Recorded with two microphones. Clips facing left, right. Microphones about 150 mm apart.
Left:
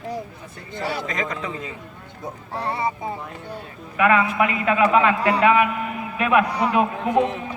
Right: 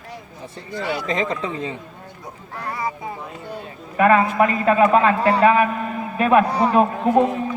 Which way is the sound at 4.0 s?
35° right (ahead or behind).